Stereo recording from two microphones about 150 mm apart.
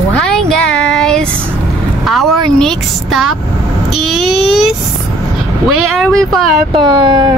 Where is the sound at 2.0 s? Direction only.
Centre (ahead or behind).